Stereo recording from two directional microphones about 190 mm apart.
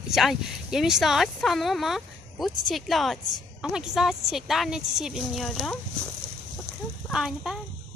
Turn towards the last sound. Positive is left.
turn(degrees=-5)  # may be behind; listen again after turning